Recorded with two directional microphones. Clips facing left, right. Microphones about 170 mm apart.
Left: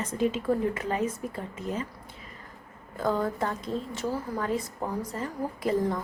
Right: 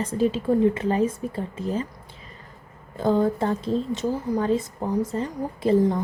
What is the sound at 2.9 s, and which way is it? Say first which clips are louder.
A woman's voice: right 6 dB; 25° right (ahead or behind).